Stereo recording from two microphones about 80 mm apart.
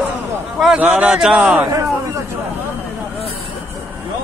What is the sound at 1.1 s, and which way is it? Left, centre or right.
Speech, centre.